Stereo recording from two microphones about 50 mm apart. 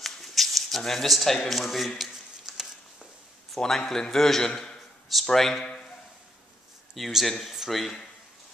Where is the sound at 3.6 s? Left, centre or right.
Centre.